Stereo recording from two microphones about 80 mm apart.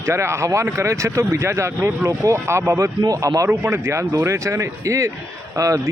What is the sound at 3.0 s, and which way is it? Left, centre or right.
A man's voice, right.